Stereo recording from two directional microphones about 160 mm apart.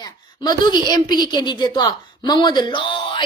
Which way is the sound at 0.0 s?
25° left (ahead or behind).